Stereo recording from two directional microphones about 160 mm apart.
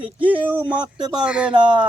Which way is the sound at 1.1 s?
5° right (ahead or behind).